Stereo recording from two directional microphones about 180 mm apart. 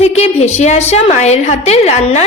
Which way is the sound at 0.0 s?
35° left (ahead or behind).